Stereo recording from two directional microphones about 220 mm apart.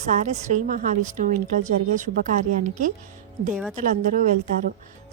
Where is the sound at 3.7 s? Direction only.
35° right (ahead or behind).